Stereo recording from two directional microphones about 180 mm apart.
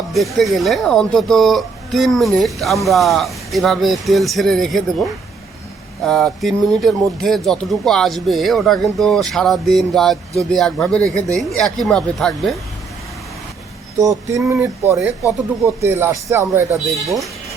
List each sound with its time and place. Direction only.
0.1 s speech: centre (ahead or behind)
6.1 s speech: centre (ahead or behind)
14.0 s speech: 15° right (ahead or behind)
16.7 s speech: centre (ahead or behind)